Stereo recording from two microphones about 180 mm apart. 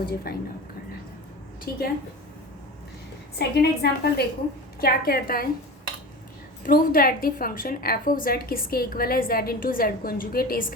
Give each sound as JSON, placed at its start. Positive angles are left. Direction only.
{"t": 0.3, "sound": "a woman's voice", "side_deg": 55}
{"t": 1.7, "sound": "a woman's voice", "side_deg": 60}
{"t": 3.3, "sound": "a woman's voice", "side_deg": 65}
{"t": 6.7, "sound": "a woman's voice", "side_deg": 55}